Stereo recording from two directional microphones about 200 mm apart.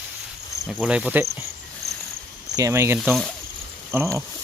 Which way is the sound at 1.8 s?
55° right (ahead or behind).